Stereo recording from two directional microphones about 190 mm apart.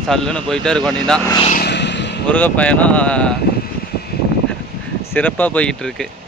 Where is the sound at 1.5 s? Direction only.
60° left (ahead or behind).